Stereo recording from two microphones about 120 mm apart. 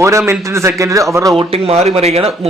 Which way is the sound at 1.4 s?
60° right (ahead or behind).